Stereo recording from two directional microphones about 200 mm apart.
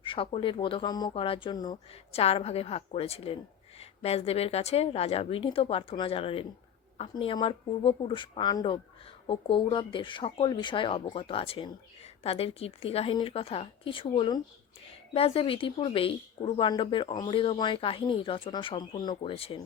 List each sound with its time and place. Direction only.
0.0 s speech: 25° left (ahead or behind)